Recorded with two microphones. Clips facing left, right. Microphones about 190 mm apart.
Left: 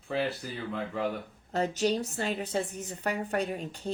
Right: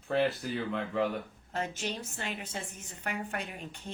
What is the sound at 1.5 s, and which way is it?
A woman's voice, 35° left (ahead or behind).